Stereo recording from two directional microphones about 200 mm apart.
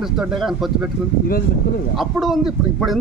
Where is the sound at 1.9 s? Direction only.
Centre (ahead or behind).